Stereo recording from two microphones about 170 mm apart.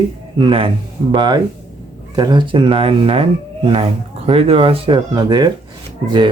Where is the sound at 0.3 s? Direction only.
30° right (ahead or behind).